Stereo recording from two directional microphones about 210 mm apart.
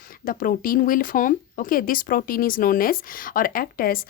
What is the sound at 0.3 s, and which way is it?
Speech, 40° left (ahead or behind).